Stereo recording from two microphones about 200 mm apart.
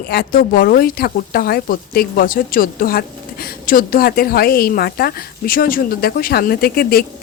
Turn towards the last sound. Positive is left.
turn(degrees=50)  # may be behind; listen again after turning